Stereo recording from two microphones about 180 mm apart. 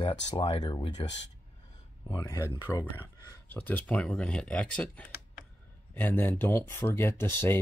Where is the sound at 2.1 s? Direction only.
20° left (ahead or behind).